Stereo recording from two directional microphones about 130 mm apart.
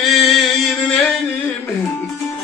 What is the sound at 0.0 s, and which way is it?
Chant, centre (ahead or behind).